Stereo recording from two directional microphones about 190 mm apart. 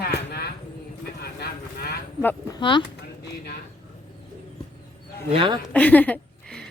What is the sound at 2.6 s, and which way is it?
Speech, 25° left (ahead or behind).